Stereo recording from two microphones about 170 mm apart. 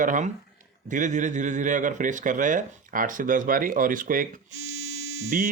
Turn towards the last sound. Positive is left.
turn(degrees=-50)  # may be behind; listen again after turning